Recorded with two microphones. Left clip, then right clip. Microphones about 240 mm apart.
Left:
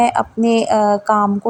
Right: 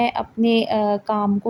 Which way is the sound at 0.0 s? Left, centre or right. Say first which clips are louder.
Left 6 dB; centre.